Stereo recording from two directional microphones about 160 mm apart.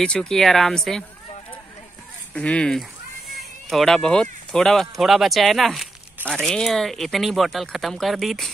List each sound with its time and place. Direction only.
0.0 s speech: 5° left (ahead or behind)
2.3 s speech: 5° left (ahead or behind)